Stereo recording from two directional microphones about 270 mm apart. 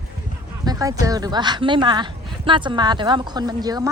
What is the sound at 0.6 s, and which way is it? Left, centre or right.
Speech, centre.